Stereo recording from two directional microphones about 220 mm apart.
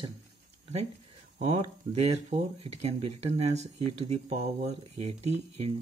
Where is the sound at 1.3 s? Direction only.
30° right (ahead or behind).